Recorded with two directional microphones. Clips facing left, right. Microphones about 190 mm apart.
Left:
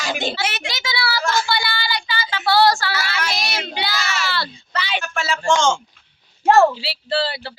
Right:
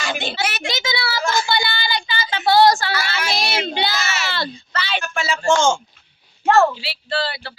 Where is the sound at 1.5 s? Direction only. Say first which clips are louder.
Right 1 dB; 20° right (ahead or behind).